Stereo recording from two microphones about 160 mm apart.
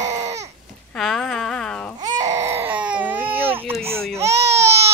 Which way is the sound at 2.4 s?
15° right (ahead or behind).